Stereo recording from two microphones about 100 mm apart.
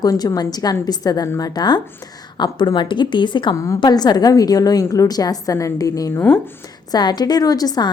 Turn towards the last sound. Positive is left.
turn(degrees=40)  # may be behind; listen again after turning